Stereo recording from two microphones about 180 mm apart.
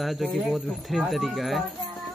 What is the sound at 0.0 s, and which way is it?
Speech, centre (ahead or behind).